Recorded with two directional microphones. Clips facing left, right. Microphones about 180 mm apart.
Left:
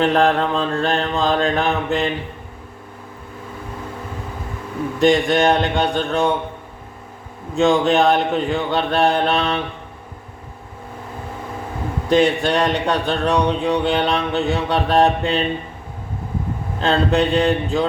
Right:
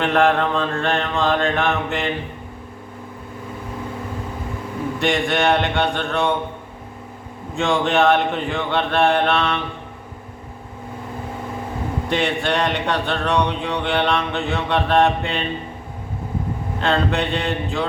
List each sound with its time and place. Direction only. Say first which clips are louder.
0.0 s speech: left 1 dB; 35° left (ahead or behind)
4.9 s speech: left 6 dB; 35° left (ahead or behind)
7.5 s speech: left 4 dB; 40° left (ahead or behind)
12.0 s speech: left 7 dB; 40° left (ahead or behind)
16.8 s speech: left 3 dB; 35° left (ahead or behind)